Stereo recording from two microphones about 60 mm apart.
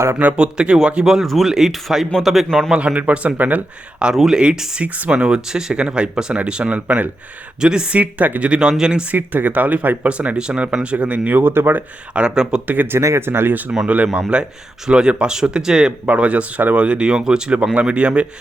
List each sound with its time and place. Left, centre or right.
0.3 s speech: centre
2.7 s speech: right
4.1 s speech: centre; by 7.1 s right
7.6 s speech: centre
7.9 s speech: right
9.1 s speech: right
12.1 s speech: centre
12.6 s speech: right
13.1 s speech: right
13.8 s speech: right